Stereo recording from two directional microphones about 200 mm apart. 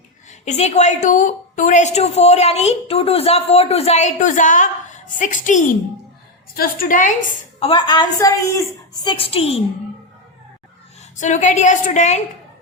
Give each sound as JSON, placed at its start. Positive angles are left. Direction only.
{"t": 0.3, "sound": "a woman's voice", "side_deg": 35}
{"t": 7.6, "sound": "a woman's voice", "side_deg": 25}
{"t": 11.2, "sound": "a woman's voice", "side_deg": 35}